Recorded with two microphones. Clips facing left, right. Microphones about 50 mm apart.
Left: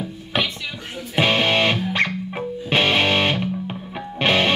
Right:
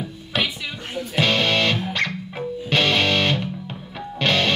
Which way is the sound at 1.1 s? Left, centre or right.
Left.